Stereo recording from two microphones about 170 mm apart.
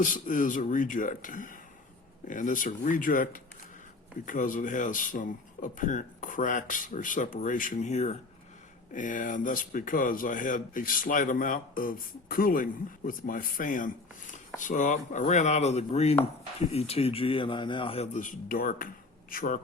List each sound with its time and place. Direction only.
0.0 s speech: 50° left (ahead or behind)